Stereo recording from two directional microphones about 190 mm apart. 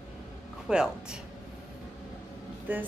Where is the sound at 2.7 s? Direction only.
10° right (ahead or behind).